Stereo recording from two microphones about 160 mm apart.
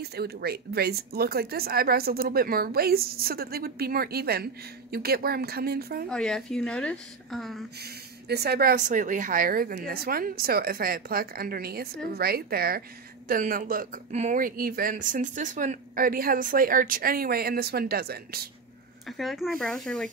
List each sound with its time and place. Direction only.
0.0 s speech: 85° right
6.0 s a woman's voice: 5° left (ahead or behind)
7.8 s speech: 90° right; by 12.8 s 70° right (ahead or behind)
13.3 s speech: 60° right (ahead or behind); by 18.4 s 75° right (ahead or behind)
19.0 s a woman's voice: centre (ahead or behind)